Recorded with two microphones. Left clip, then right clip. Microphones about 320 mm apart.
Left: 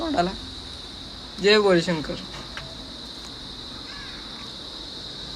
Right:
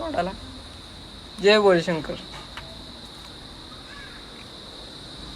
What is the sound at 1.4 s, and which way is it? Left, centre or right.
Speech, centre.